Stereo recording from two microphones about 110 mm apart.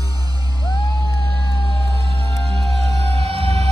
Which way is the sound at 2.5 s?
60° right (ahead or behind).